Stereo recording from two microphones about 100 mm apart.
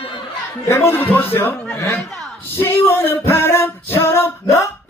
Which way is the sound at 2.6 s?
25° left (ahead or behind).